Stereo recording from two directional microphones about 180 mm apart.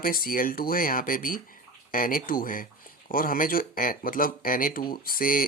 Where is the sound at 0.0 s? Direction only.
55° left (ahead or behind).